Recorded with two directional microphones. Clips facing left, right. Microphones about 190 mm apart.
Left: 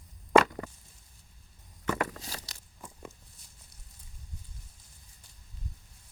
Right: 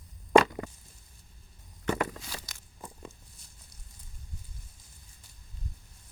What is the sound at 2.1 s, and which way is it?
Walk, 35° left (ahead or behind).